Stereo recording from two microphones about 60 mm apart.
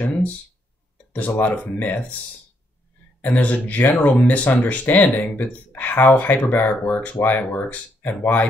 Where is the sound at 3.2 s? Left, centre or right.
Left.